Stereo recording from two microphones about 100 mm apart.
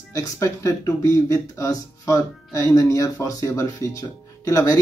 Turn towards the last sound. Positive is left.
turn(degrees=35)  # may be behind; listen again after turning